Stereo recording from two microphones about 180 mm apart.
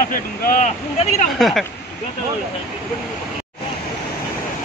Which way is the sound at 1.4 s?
Centre (ahead or behind).